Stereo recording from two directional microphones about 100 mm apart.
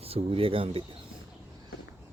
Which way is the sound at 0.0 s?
70° right (ahead or behind).